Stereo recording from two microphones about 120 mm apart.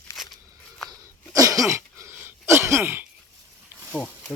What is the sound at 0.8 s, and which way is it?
Cough, 30° right (ahead or behind).